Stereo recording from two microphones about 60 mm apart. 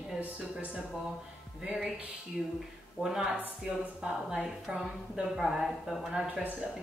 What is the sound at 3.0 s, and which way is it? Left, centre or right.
A woman's voice, centre.